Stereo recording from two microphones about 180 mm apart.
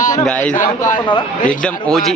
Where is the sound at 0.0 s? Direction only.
45° left (ahead or behind).